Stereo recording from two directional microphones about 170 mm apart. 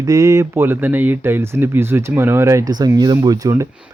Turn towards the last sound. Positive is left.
turn(degrees=-20)  # may be behind; listen again after turning